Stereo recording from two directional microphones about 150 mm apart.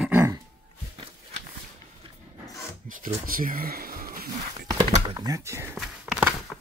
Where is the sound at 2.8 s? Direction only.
65° right (ahead or behind).